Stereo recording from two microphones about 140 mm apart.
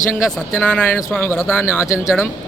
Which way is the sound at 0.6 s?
10° left (ahead or behind).